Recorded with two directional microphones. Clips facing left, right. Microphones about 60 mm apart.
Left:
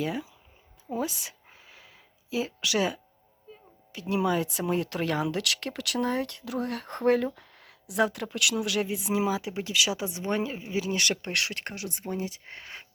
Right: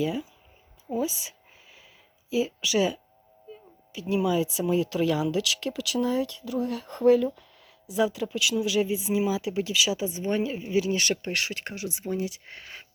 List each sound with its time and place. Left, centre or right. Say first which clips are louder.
0.0 s speech: right 3 dB; left
0.9 s a sound: right 3 dB; left
2.3 s speech: right 3 dB; left
4.1 s speech: right 2 dB; left
9.3 s speech: right 3 dB; left
9.7 s speech: right 2 dB; left
10.9 s speech: right 1 dB; left